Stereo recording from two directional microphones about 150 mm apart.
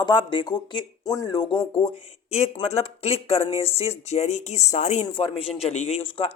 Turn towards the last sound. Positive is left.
turn(degrees=35)  # may be behind; listen again after turning